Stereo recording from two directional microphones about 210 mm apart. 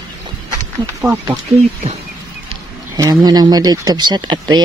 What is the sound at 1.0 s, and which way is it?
Speech, 10° right (ahead or behind).